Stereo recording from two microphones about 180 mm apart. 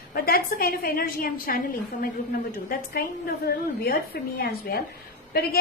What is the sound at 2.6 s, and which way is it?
A woman's voice, 55° left (ahead or behind).